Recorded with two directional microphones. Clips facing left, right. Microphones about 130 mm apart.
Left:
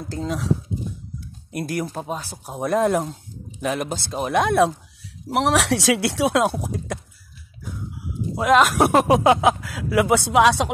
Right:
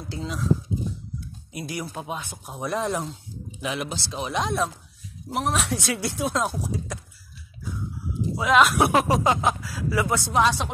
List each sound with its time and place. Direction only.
0.1 s speech: 45° left (ahead or behind)
1.5 s speech: 55° left (ahead or behind); by 2.5 s 35° left (ahead or behind)
2.5 s speech: 50° left (ahead or behind)
5.3 s speech: 80° left
6.6 s speech: 55° left (ahead or behind)
8.4 s speech: 50° left (ahead or behind)
9.0 s speech: 65° left (ahead or behind); by 10.7 s 85° left